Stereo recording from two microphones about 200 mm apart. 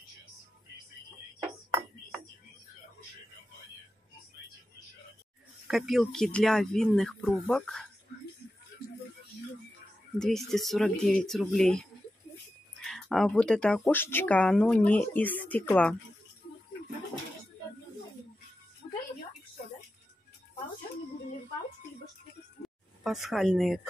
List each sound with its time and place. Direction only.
5.7 s speech: centre (ahead or behind)
10.1 s speech: centre (ahead or behind)
12.8 s speech: centre (ahead or behind)
22.6 s a sound: 50° left (ahead or behind)
23.0 s speech: centre (ahead or behind)